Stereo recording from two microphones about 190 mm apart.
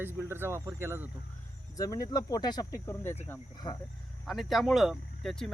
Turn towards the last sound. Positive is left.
turn(degrees=0)  # may be behind; listen again after turning